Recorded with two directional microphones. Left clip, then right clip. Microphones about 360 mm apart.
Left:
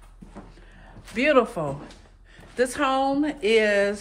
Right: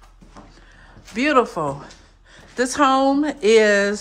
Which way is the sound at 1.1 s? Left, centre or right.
Centre.